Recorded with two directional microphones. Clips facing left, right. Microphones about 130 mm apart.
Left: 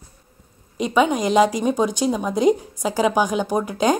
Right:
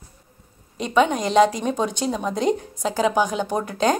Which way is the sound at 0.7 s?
10° left (ahead or behind).